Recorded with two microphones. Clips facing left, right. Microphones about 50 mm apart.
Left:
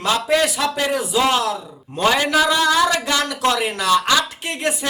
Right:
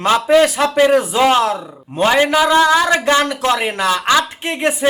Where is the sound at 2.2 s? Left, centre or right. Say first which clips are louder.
Right 4 dB; right.